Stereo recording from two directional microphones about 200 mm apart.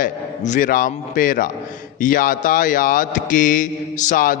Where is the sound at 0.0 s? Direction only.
40° left (ahead or behind).